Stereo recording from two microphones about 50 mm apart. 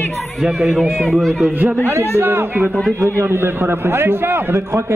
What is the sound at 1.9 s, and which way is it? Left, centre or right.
A man's voice, right.